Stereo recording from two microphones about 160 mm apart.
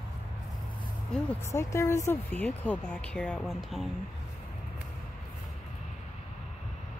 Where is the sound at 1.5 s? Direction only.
15° left (ahead or behind); by 3.8 s centre (ahead or behind).